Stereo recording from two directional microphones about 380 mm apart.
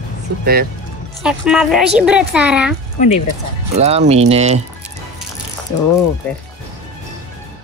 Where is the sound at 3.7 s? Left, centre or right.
Centre.